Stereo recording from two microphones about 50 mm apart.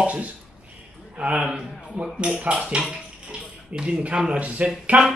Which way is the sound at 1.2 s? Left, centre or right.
Centre.